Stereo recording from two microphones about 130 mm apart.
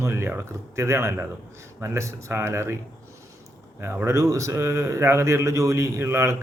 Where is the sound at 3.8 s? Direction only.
20° right (ahead or behind).